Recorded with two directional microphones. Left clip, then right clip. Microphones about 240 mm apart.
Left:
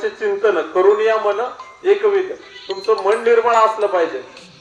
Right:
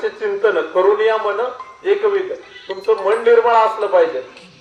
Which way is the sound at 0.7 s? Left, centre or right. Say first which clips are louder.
Left 1 dB; left.